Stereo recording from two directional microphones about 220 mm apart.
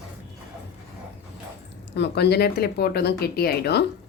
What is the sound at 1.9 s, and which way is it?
Speech, 50° left (ahead or behind).